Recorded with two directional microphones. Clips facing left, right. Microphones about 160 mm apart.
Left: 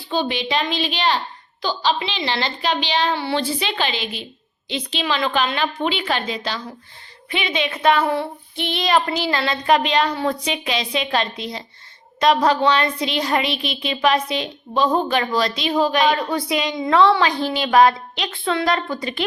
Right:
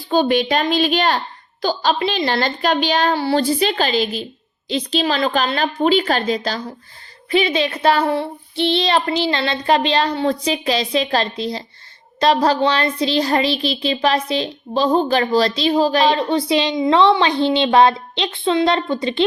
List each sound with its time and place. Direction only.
0.1 s a woman's voice: 45° right (ahead or behind); by 19.2 s 25° right (ahead or behind)